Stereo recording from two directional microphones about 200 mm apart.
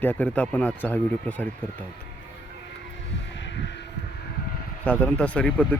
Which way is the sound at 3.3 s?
65° left (ahead or behind).